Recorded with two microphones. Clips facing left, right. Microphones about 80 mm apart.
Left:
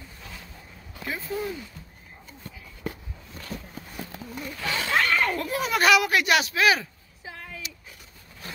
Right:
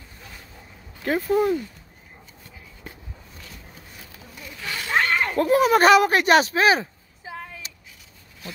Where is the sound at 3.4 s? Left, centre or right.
Left.